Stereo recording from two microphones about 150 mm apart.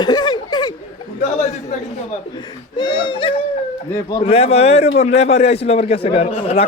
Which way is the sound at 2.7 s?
30° left (ahead or behind).